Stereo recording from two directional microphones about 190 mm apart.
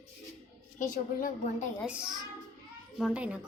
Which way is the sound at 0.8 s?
45° left (ahead or behind).